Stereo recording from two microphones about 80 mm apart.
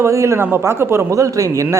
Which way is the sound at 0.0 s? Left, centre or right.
Right.